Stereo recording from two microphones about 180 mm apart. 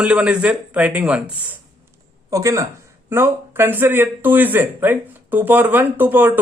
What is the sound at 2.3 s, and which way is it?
Speech, 20° right (ahead or behind).